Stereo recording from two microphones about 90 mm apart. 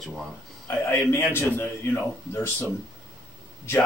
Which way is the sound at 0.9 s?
30° left (ahead or behind).